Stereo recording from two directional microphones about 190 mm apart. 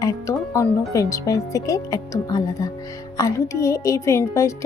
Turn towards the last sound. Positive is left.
turn(degrees=15)  # may be behind; listen again after turning